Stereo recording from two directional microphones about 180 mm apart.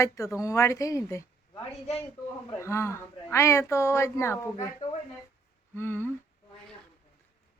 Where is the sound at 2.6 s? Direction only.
15° left (ahead or behind).